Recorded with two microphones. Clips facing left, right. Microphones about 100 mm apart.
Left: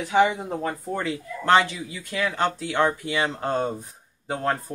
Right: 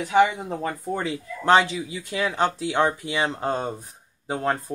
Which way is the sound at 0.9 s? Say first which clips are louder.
Even; 20° right (ahead or behind).